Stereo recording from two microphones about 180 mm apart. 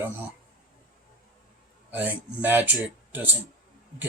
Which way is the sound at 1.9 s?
10° right (ahead or behind).